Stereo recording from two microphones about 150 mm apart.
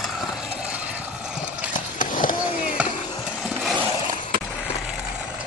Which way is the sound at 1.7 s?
60° left (ahead or behind).